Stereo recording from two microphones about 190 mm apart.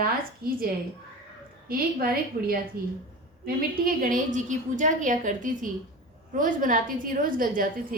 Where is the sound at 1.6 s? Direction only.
50° right (ahead or behind).